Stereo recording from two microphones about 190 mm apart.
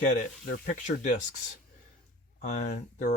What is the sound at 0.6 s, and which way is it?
Speech, 40° left (ahead or behind).